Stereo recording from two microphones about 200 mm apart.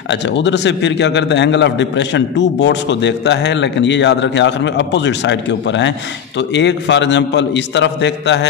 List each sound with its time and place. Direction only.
0.1 s a man's voice: 60° left (ahead or behind)